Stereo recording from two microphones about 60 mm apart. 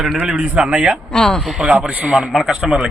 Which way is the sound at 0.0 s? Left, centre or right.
Centre.